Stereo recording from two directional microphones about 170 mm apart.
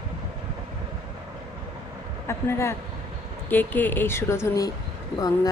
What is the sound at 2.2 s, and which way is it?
Speech, 15° left (ahead or behind).